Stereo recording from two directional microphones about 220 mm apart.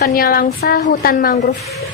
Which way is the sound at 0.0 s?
40° left (ahead or behind).